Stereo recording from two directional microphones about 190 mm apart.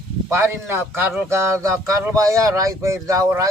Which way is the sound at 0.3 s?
15° right (ahead or behind).